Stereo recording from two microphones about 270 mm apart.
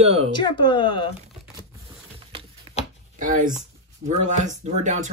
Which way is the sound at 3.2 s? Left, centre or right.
Right.